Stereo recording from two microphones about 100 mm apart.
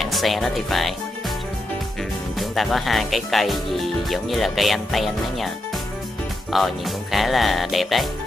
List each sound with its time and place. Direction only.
0.0 s speech: centre (ahead or behind)
2.3 s speech: centre (ahead or behind)
6.5 s speech: centre (ahead or behind)